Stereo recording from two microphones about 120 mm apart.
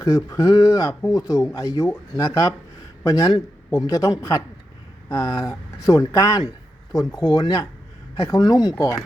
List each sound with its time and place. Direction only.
0.0 s speech: 30° left (ahead or behind)